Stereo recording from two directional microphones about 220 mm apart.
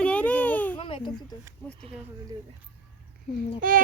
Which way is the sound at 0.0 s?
5° left (ahead or behind).